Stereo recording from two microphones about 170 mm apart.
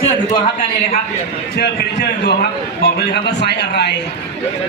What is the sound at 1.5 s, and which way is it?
A man's voice, 75° left (ahead or behind).